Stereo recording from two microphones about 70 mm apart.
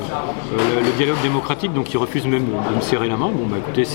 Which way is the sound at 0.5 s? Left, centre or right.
Centre.